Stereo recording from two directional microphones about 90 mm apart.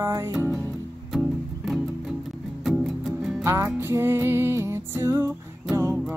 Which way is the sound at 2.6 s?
5° right (ahead or behind).